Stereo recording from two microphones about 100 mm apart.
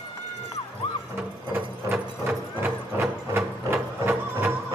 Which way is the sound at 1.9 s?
25° right (ahead or behind).